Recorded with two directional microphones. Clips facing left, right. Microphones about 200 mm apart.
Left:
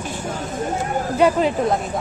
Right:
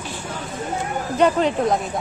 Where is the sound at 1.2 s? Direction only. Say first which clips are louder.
Left 1 dB; 5° left (ahead or behind).